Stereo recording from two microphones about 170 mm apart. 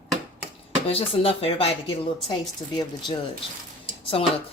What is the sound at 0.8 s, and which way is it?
Speech, 35° left (ahead or behind).